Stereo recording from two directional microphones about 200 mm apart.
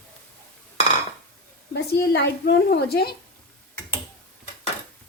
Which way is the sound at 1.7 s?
50° left (ahead or behind).